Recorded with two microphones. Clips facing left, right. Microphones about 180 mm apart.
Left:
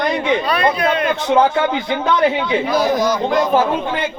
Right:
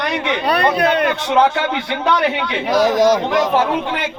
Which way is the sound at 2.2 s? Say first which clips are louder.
Left 3 dB; 80° right.